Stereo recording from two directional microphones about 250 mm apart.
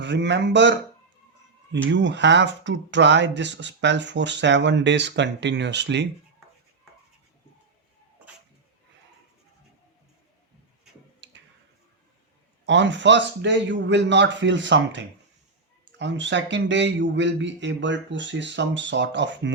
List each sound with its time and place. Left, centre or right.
0.0 s speech: right
1.9 s speech: right
11.2 s a sound: right
12.6 s speech: right